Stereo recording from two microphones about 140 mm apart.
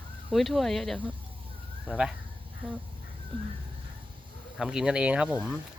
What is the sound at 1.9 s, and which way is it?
Speech, 10° right (ahead or behind).